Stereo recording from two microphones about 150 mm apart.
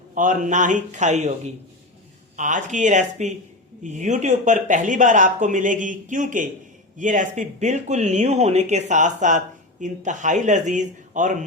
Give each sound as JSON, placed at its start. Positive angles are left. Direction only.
{"t": 0.1, "sound": "speech", "side_deg": -60}
{"t": 2.3, "sound": "speech", "side_deg": -55}